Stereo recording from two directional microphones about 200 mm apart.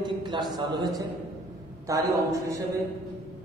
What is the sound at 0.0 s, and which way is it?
A man's voice, 20° right (ahead or behind).